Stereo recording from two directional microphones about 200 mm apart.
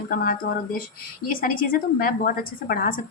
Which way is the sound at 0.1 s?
45° left (ahead or behind).